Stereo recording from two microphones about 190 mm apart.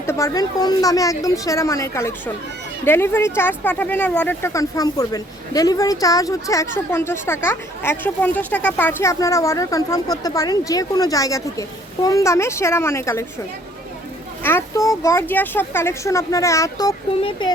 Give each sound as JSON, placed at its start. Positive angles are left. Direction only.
{"t": 0.0, "sound": "speech", "side_deg": 15}
{"t": 14.4, "sound": "speech", "side_deg": 15}
{"t": 17.2, "sound": "speech", "side_deg": 30}